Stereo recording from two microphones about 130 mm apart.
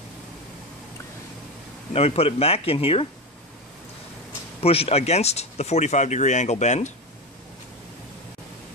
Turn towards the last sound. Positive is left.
turn(degrees=60)  # may be behind; listen again after turning